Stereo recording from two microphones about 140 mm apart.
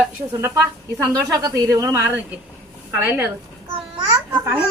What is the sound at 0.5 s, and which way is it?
A woman's voice, 25° right (ahead or behind).